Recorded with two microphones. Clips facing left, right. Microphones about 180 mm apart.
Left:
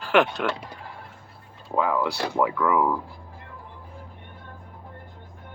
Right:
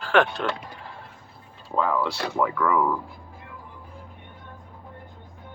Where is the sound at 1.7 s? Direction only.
10° left (ahead or behind).